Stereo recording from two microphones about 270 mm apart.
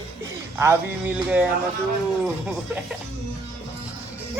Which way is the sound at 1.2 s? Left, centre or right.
Centre.